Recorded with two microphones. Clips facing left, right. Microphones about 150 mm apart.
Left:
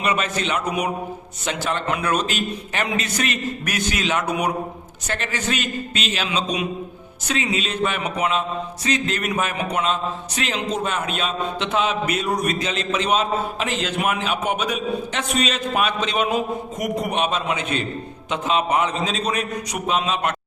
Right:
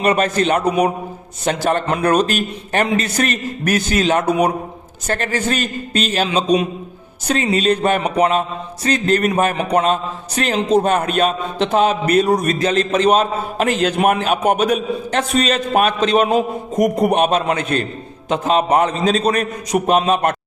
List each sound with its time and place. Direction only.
0.0 s a man's voice: 40° right (ahead or behind)
0.3 s mantra: 45° right (ahead or behind)
0.6 s a man's voice: 35° right (ahead or behind)
5.0 s mantra: 45° right (ahead or behind)
6.1 s a man's voice: 35° right (ahead or behind)
7.3 s mantra: 40° right (ahead or behind)
11.6 s a man's voice: 40° right (ahead or behind)
17.4 s mantra: 45° right (ahead or behind)